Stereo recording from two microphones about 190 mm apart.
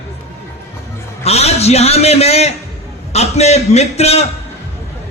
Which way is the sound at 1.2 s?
35° left (ahead or behind).